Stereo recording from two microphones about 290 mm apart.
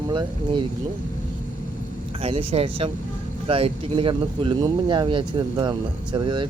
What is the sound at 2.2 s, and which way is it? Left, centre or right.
Speech, centre.